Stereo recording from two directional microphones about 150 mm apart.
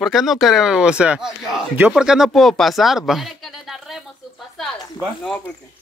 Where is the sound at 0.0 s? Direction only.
Centre (ahead or behind).